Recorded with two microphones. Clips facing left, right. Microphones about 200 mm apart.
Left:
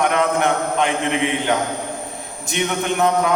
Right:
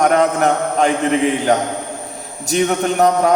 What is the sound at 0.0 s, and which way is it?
A man's voice, 40° right (ahead or behind).